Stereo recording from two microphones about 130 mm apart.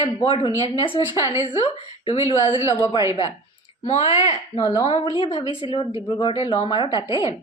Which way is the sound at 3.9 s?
55° left (ahead or behind).